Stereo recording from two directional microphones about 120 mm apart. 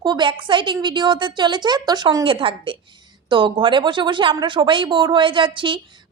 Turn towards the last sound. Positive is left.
turn(degrees=-45)  # may be behind; listen again after turning